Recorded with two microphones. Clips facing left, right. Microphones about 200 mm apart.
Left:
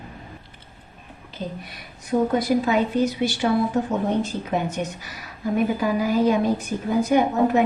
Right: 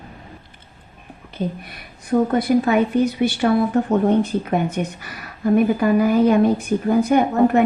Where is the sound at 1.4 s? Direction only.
50° right (ahead or behind).